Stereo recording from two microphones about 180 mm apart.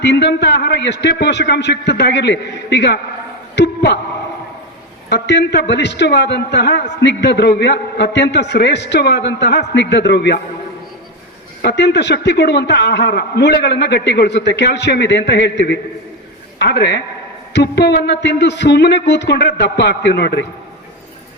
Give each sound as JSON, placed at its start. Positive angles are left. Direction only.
{"t": 0.0, "sound": "a man's voice", "side_deg": 70}
{"t": 5.0, "sound": "a man's voice", "side_deg": 65}
{"t": 11.6, "sound": "a man's voice", "side_deg": 65}